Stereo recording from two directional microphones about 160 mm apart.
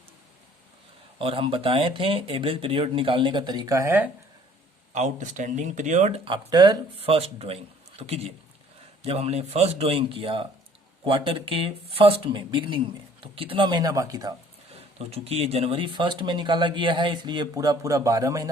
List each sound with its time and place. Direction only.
1.2 s speech: 35° right (ahead or behind); by 4.1 s 10° right (ahead or behind)
4.9 s speech: 50° right (ahead or behind); by 14.3 s 20° right (ahead or behind)
14.9 s speech: 40° right (ahead or behind); by 18.4 s 20° right (ahead or behind)